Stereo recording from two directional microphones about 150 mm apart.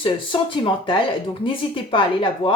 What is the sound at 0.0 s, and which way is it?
Speech, 35° left (ahead or behind).